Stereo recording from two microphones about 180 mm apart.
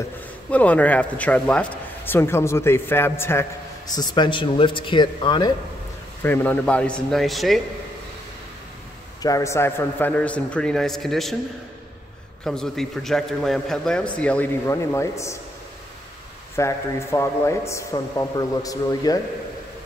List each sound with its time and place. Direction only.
0.5 s speech: 10° left (ahead or behind)
3.9 s speech: 25° left (ahead or behind)
6.2 s a man's voice: 10° left (ahead or behind)
9.2 s speech: 20° left (ahead or behind); by 11.3 s centre (ahead or behind)
12.4 s a man's voice: 5° left (ahead or behind)
16.5 s speech: 15° left (ahead or behind)